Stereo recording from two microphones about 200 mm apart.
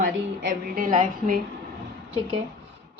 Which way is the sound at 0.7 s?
40° right (ahead or behind).